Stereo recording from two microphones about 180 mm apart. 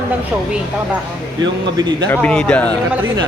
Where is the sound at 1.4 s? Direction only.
25° right (ahead or behind).